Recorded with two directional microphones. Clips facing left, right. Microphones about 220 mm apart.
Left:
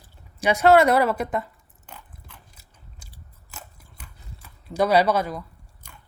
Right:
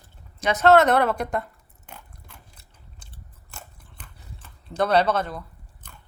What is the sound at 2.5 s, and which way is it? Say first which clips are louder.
Biting: even; 5° left (ahead or behind).